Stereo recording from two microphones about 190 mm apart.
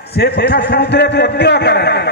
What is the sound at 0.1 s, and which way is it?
A man's voice, 60° left (ahead or behind).